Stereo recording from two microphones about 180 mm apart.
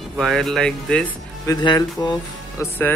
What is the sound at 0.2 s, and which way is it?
Speech, centre (ahead or behind).